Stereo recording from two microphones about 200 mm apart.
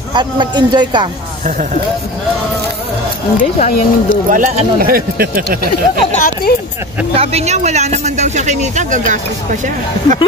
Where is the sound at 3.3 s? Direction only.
35° left (ahead or behind).